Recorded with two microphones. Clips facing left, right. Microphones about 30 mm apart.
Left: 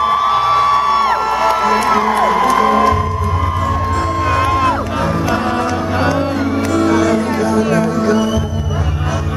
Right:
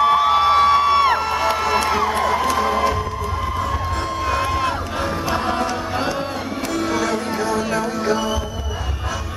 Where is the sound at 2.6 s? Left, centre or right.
Left.